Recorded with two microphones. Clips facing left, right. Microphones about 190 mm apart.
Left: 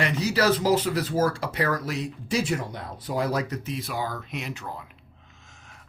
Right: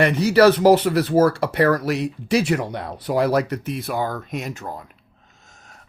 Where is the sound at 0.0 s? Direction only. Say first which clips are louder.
Right 9 dB; 60° right (ahead or behind).